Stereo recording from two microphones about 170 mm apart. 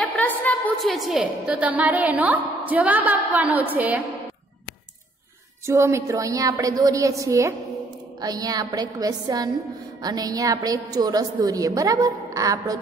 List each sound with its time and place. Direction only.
0.0 s a sound: 10° left (ahead or behind)
0.7 s a woman's voice: centre (ahead or behind)
5.7 s a woman's voice: 15° right (ahead or behind)